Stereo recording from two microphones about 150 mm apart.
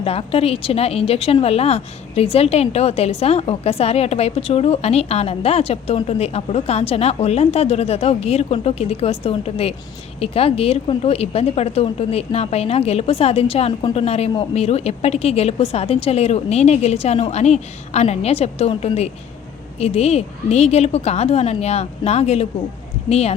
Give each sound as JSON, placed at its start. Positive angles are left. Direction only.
{"t": 0.0, "sound": "a woman's voice", "side_deg": 40}